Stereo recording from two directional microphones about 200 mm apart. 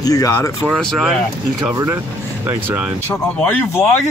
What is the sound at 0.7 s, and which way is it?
Speech, centre (ahead or behind).